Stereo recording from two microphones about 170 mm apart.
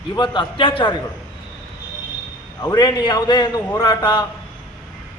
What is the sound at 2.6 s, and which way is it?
A man's voice, 25° left (ahead or behind).